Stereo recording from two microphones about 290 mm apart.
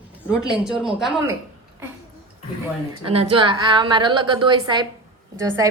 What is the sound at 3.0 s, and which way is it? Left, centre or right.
A woman's voice, centre.